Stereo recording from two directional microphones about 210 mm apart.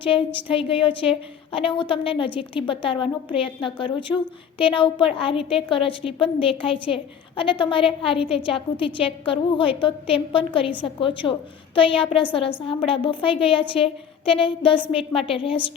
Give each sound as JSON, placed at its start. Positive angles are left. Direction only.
{"t": 0.4, "sound": "a woman's voice", "side_deg": 25}